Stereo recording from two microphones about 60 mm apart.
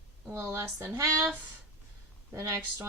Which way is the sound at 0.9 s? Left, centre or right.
Right.